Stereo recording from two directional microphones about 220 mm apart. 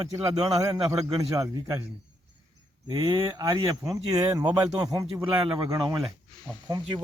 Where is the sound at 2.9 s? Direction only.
20° right (ahead or behind).